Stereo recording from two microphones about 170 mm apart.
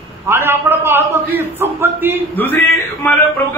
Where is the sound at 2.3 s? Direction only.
10° left (ahead or behind).